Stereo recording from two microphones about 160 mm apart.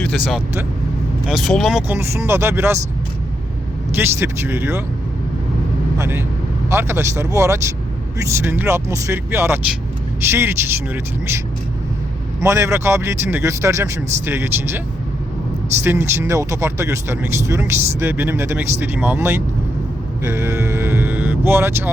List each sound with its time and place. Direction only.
0.0 s speech: 5° left (ahead or behind)
1.9 s speech: 15° right (ahead or behind)
3.9 s speech: 15° right (ahead or behind)
6.0 s speech: 15° right (ahead or behind)
12.4 s speech: 20° right (ahead or behind)
15.8 s speech: 15° right (ahead or behind)
20.2 s vehicle: 15° right (ahead or behind)